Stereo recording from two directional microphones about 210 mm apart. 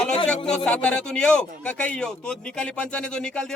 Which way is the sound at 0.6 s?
5° left (ahead or behind).